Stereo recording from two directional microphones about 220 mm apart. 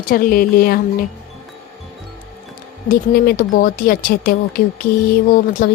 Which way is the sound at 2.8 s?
40° left (ahead or behind).